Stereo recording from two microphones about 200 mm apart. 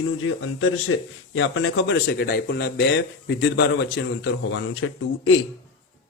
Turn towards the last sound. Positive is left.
turn(degrees=85)